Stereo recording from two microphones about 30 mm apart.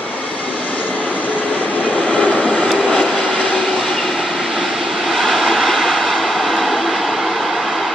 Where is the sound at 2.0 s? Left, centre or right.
Left.